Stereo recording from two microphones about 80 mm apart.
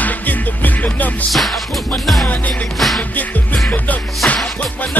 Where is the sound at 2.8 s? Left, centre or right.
Centre.